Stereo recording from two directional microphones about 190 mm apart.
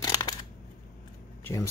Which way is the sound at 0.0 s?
20° left (ahead or behind).